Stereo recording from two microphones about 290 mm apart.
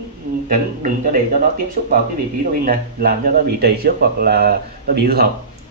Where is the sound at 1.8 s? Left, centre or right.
Right.